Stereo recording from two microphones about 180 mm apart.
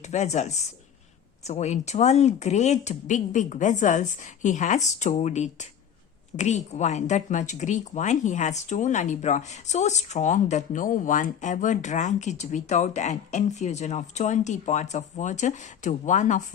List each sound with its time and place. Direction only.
0.1 s speech: 40° left (ahead or behind)